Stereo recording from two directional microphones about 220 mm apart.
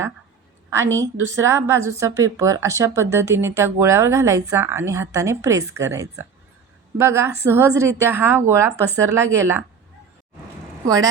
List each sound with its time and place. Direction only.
1.4 s speech: 15° right (ahead or behind)
8.7 s speech: 10° left (ahead or behind)
9.0 s speech: 10° right (ahead or behind)
10.8 s speech: 15° right (ahead or behind)